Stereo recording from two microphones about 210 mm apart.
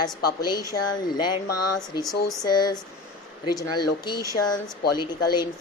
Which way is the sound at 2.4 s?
20° left (ahead or behind).